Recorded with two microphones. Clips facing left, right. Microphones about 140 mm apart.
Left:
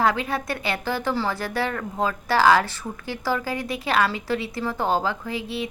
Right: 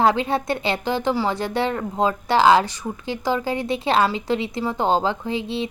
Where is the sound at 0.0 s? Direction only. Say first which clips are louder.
Right 4 dB; 25° right (ahead or behind).